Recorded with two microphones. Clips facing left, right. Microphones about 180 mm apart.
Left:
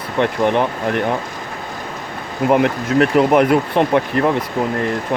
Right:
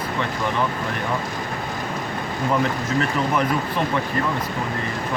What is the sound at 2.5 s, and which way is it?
Speech, 65° left (ahead or behind).